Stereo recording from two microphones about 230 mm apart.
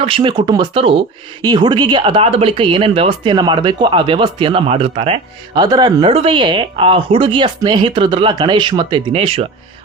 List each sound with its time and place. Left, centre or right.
0.0 s speech: right